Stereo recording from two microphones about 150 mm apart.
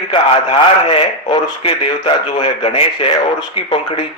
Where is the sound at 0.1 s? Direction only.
40° left (ahead or behind).